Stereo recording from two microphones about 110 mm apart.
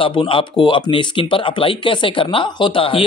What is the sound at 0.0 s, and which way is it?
A man's voice, 50° left (ahead or behind).